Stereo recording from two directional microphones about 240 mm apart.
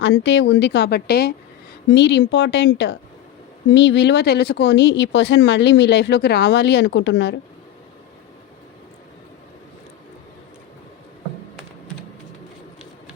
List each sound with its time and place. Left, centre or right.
0.0 s speech: left